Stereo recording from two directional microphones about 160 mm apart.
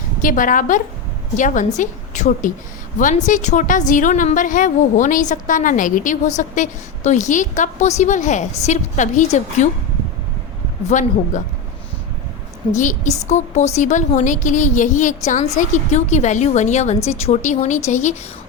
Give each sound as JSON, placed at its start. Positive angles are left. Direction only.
{"t": 0.2, "sound": "a woman's voice", "side_deg": 55}
{"t": 10.8, "sound": "a woman's voice", "side_deg": 50}
{"t": 12.7, "sound": "a woman's voice", "side_deg": 50}